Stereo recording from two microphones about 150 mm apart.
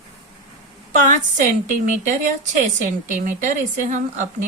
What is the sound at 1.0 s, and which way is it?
Speech, 60° right (ahead or behind).